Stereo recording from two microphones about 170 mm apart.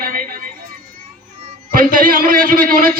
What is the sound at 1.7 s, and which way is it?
A man's voice, 55° right (ahead or behind).